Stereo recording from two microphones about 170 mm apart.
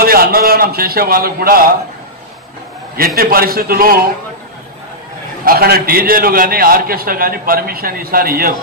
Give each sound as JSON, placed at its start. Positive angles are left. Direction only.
{"t": 0.0, "sound": "a man's voice", "side_deg": -60}
{"t": 3.2, "sound": "a man's voice", "side_deg": -60}
{"t": 5.4, "sound": "a man's voice", "side_deg": -60}